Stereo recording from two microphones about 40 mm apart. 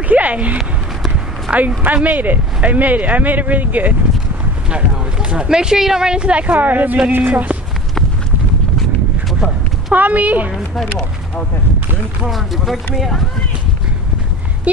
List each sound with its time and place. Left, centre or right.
0.1 s a man's voice: right
2.0 s speech: right
4.6 s speech: right
6.4 s speech: right
9.9 s speech: right
12.3 s speech: centre